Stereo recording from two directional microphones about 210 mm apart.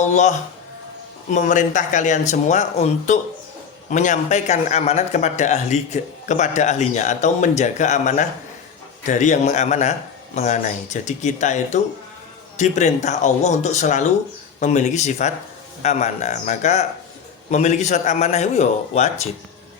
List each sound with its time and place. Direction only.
0.0 s speech: 35° left (ahead or behind)